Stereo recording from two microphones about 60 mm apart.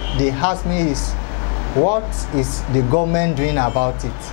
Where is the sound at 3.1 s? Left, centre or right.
Left.